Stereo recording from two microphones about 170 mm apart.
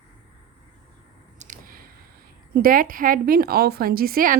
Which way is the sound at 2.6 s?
55° right (ahead or behind).